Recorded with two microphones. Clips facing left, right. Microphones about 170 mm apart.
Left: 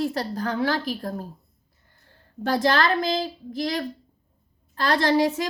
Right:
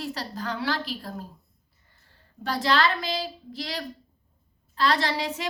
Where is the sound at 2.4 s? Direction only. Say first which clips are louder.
Left 3 dB; 50° left (ahead or behind).